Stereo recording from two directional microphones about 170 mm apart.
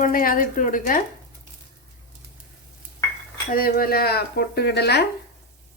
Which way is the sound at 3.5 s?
60° left (ahead or behind).